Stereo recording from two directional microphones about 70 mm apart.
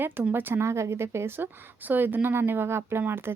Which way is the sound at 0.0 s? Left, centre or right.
Right.